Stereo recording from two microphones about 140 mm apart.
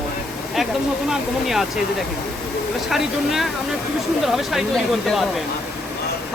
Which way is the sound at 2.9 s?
Centre (ahead or behind).